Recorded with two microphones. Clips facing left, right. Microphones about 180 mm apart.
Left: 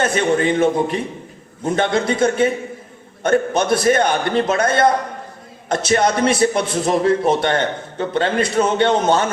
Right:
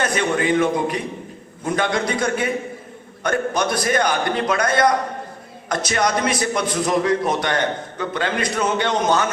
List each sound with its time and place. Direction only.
0.0 s a man's voice: 25° left (ahead or behind)